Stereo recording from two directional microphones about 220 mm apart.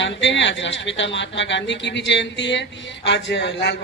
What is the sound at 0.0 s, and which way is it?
A woman's voice, 55° left (ahead or behind).